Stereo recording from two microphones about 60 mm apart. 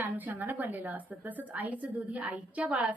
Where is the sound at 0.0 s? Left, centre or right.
Right.